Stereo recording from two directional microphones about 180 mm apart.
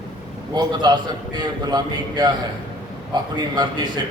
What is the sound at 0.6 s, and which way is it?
A man's voice, 25° right (ahead or behind).